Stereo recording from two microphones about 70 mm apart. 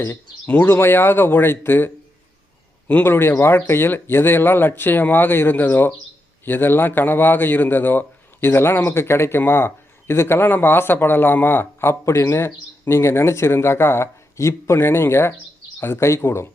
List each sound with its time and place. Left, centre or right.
0.6 s a man's voice: left
3.0 s a man's voice: left